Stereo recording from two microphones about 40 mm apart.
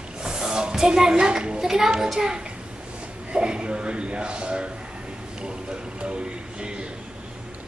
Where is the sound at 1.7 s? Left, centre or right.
Centre.